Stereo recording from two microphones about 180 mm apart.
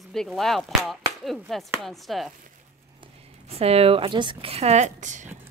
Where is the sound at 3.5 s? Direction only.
35° right (ahead or behind).